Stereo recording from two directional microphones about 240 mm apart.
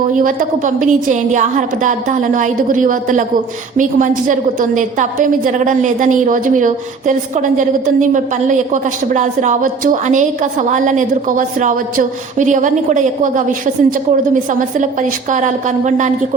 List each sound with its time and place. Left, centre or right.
0.1 s a woman's voice: right